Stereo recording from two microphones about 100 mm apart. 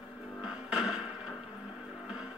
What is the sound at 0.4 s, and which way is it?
Music, 5° right (ahead or behind).